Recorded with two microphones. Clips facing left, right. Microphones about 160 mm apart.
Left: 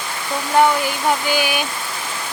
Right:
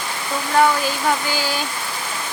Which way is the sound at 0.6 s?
15° left (ahead or behind).